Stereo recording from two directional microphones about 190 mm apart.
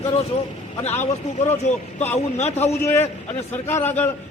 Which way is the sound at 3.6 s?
10° left (ahead or behind).